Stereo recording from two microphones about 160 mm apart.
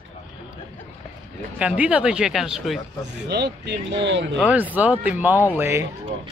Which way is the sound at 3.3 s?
90° right.